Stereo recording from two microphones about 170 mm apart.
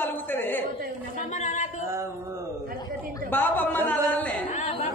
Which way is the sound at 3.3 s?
10° left (ahead or behind).